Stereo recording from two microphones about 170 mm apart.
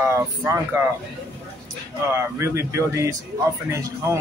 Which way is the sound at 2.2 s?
15° right (ahead or behind).